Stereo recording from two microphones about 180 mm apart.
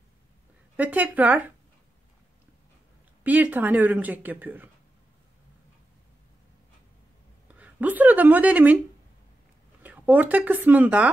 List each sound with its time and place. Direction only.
0.7 s speech: 10° right (ahead or behind)
3.3 s speech: 10° right (ahead or behind)
7.5 s a woman's voice: 10° right (ahead or behind)
9.8 s speech: 10° right (ahead or behind)